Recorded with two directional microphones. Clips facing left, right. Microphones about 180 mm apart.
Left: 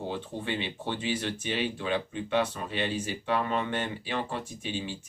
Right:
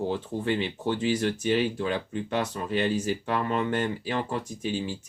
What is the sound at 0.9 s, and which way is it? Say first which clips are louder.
Speech: right 6 dB; 40° right (ahead or behind).